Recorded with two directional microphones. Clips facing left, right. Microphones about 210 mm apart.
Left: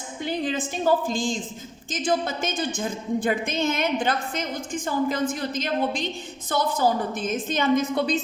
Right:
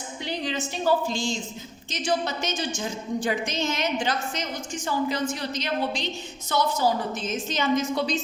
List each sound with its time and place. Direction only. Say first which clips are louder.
0.2 s a woman's voice: left 4 dB; 50° left (ahead or behind)